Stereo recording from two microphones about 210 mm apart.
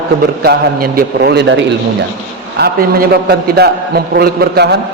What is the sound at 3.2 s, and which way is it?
A man's voice, 50° right (ahead or behind).